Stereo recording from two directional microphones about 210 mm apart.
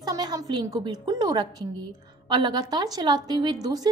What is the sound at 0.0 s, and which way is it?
A woman's voice, 20° right (ahead or behind).